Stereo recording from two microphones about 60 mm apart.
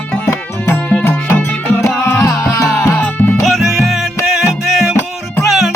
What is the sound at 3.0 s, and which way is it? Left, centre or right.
Music, left.